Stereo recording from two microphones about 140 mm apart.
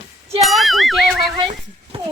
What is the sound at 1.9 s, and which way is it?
Horse, 40° right (ahead or behind).